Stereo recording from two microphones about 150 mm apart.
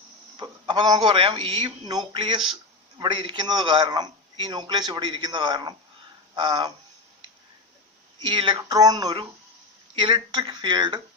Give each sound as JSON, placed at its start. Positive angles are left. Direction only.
{"t": 0.3, "sound": "a man's voice", "side_deg": -30}
{"t": 8.2, "sound": "a man's voice", "side_deg": -35}